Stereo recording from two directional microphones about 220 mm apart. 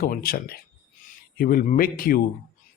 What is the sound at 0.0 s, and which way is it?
A man's voice, 40° left (ahead or behind).